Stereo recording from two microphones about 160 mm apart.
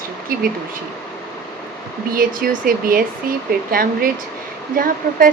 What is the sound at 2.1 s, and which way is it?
Speech, 65° right (ahead or behind).